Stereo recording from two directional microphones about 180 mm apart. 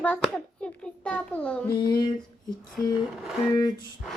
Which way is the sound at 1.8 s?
25° left (ahead or behind).